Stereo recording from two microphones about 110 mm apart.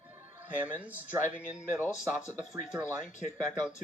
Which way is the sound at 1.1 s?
30° right (ahead or behind).